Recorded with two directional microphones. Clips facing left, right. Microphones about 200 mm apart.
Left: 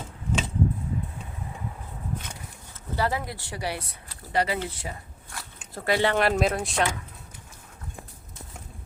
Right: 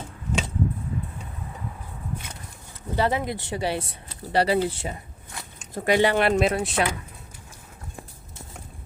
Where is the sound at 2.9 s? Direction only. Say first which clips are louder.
Right 4 dB; 20° right (ahead or behind).